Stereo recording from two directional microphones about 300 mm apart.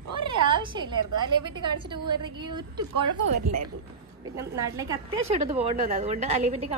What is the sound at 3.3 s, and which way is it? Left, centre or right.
Speech, right.